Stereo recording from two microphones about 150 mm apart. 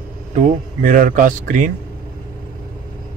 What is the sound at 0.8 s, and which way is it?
Speech, 65° right (ahead or behind).